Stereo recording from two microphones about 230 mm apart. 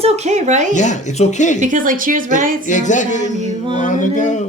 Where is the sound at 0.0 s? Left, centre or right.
Right.